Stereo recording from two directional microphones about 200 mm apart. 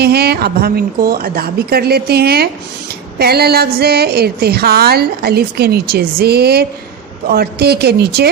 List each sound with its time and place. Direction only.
0.0 s a woman's voice: 50° right (ahead or behind)